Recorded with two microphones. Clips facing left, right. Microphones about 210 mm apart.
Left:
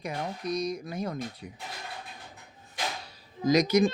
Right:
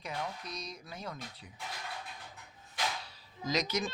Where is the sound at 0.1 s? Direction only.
40° left (ahead or behind).